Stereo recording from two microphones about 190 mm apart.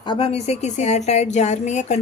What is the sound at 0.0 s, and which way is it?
A woman's voice, 25° left (ahead or behind).